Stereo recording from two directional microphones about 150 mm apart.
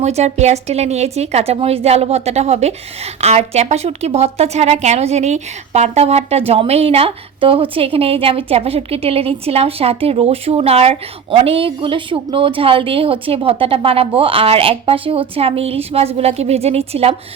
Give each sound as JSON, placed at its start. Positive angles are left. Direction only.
{"t": 0.0, "sound": "a woman's voice", "side_deg": -45}